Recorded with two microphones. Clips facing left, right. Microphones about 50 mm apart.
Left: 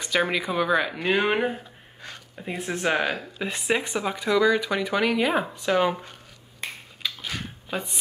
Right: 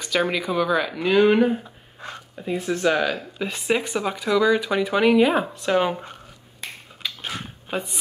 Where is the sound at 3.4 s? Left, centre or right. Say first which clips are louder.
Right 2 dB; centre.